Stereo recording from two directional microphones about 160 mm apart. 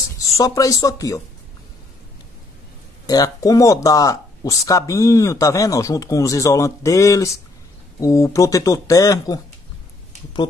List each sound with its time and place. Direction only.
0.4 s speech: 20° left (ahead or behind)
3.1 s speech: 25° left (ahead or behind)